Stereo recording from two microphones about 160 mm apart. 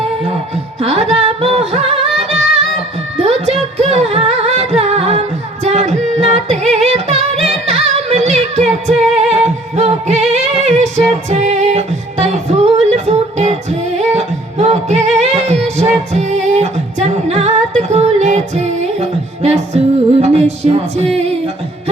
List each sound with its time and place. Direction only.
0.8 s music: 40° right (ahead or behind)
3.4 s music: 40° right (ahead or behind)